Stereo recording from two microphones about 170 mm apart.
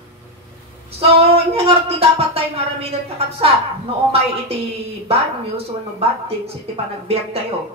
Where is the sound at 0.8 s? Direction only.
35° right (ahead or behind).